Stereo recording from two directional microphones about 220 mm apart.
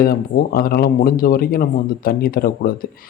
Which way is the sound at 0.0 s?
40° left (ahead or behind).